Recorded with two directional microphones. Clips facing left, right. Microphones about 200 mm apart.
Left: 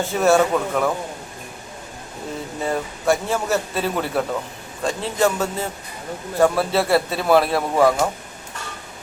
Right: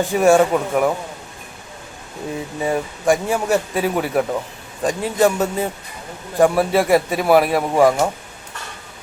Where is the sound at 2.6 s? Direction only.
15° right (ahead or behind).